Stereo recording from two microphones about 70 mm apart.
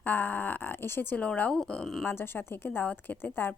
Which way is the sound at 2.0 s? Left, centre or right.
Left.